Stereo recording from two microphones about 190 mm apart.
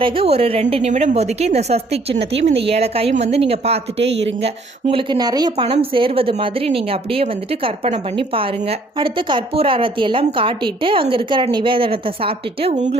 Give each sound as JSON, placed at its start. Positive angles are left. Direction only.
{"t": 0.0, "sound": "a woman's voice", "side_deg": -30}
{"t": 4.0, "sound": "speech", "side_deg": -65}
{"t": 4.4, "sound": "a woman's voice", "side_deg": -30}
{"t": 9.0, "sound": "a woman's voice", "side_deg": -25}